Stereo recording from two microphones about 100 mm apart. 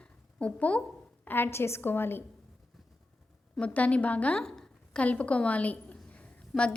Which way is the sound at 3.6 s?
15° left (ahead or behind).